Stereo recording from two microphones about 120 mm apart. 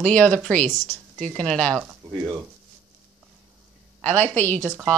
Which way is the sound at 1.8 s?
5° right (ahead or behind).